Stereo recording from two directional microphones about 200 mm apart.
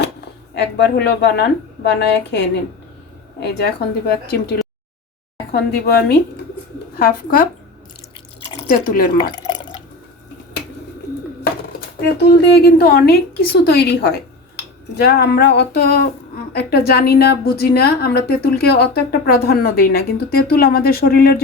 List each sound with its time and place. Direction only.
0.5 s a woman's voice: 55° left (ahead or behind)
3.4 s a woman's voice: 50° left (ahead or behind)
5.5 s a woman's voice: 55° left (ahead or behind)
8.6 s speech: 50° left (ahead or behind)
9.1 s drip: 20° left (ahead or behind)
12.1 s a woman's voice: 50° left (ahead or behind)